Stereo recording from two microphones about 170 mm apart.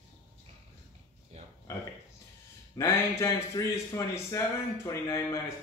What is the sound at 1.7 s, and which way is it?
A man's voice, 15° left (ahead or behind).